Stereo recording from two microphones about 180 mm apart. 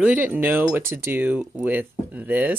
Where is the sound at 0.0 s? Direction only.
10° right (ahead or behind).